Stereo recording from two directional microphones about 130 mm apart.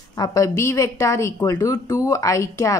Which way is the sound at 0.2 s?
25° left (ahead or behind).